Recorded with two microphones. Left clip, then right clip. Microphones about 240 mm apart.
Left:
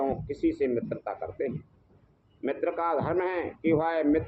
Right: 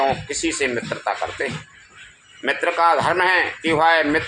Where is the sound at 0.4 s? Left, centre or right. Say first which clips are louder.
Right 5 dB; right.